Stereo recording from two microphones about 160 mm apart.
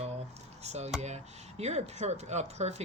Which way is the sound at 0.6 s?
45° right (ahead or behind).